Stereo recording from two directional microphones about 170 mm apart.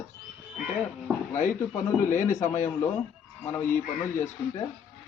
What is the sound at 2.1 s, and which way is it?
Speech, 50° left (ahead or behind).